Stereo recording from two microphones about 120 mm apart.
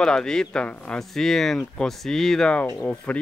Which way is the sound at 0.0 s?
5° left (ahead or behind).